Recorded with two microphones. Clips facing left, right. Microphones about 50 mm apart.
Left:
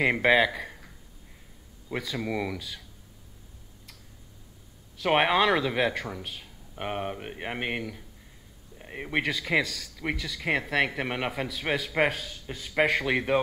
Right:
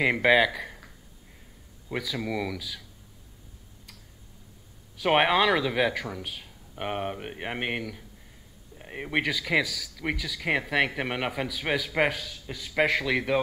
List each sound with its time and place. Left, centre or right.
0.0 s speech: centre
1.9 s speech: centre
5.0 s speech: centre
13.1 s speech: left